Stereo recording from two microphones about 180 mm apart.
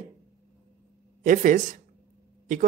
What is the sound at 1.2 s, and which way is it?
A man's voice, 45° right (ahead or behind).